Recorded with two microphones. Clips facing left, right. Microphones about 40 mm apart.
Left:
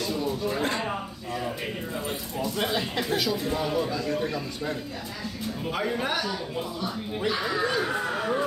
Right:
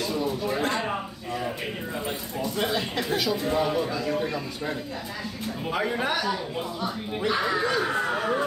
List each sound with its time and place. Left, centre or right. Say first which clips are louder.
0.0 s a sound: right 1 dB; centre
2.6 s a man's voice: right 1 dB; centre
7.9 s chatter: right 2 dB; centre